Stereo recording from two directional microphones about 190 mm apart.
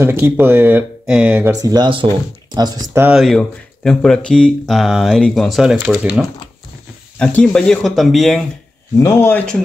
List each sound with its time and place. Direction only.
0.0 s speech: 10° right (ahead or behind)
1.5 s speech: 20° right (ahead or behind)
3.2 s speech: centre (ahead or behind)
8.9 s speech: 15° left (ahead or behind)